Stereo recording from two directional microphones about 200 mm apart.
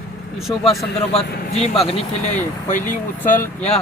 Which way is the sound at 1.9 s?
40° left (ahead or behind).